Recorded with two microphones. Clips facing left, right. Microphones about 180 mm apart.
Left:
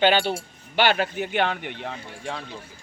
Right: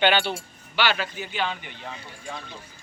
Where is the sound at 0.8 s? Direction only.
50° left (ahead or behind); by 2.4 s 70° left (ahead or behind).